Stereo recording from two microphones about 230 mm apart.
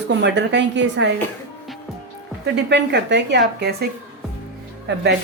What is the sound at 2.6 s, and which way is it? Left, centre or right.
A woman's voice, right.